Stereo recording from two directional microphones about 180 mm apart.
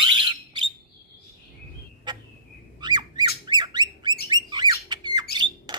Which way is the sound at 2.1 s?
25° right (ahead or behind).